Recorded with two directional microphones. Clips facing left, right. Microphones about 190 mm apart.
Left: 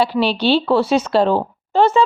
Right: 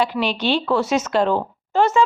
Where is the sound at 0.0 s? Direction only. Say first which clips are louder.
Left 4 dB; 35° left (ahead or behind).